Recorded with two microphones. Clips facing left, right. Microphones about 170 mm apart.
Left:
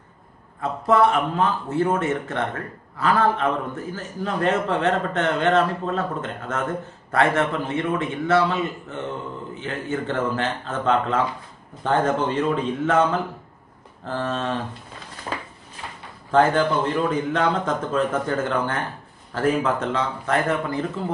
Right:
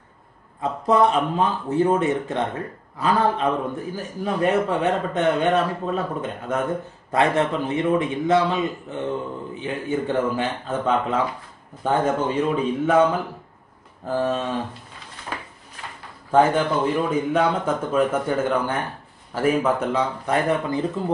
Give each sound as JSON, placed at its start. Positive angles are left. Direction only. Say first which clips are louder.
{"t": 0.6, "sound": "a man's voice", "louder": "even", "side_deg": -20}
{"t": 16.3, "sound": "a man's voice", "louder": "even", "side_deg": -10}